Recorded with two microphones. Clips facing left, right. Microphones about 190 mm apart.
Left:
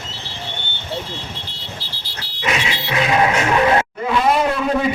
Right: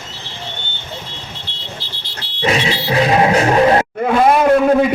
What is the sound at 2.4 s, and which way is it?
Music, 35° right (ahead or behind).